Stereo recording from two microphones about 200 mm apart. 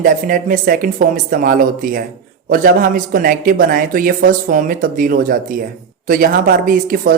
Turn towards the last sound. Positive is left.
turn(degrees=-45)  # may be behind; listen again after turning